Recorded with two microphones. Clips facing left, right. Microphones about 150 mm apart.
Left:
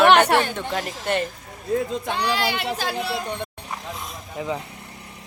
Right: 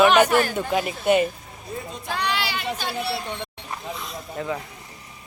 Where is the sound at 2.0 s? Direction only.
25° left (ahead or behind).